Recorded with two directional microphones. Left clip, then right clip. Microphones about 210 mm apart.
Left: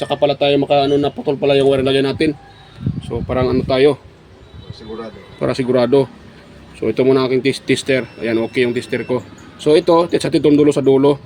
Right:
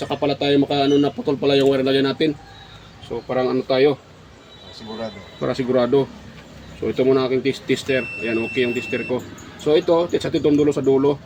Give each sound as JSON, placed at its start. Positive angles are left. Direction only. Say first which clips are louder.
{"t": 0.0, "sound": "speech", "louder": "left 6 dB", "side_deg": 45}
{"t": 5.4, "sound": "speech", "louder": "left 4 dB", "side_deg": 50}